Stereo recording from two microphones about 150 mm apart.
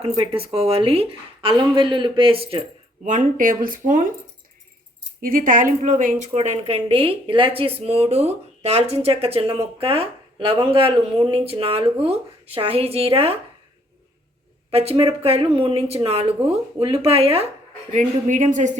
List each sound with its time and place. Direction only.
0.2 s a woman's voice: 40° right (ahead or behind)
3.0 s speech: 60° right (ahead or behind)
5.2 s a woman's voice: 65° right (ahead or behind); by 13.4 s 40° right (ahead or behind)
14.7 s a woman's voice: 40° right (ahead or behind)
17.9 s speech: 55° right (ahead or behind)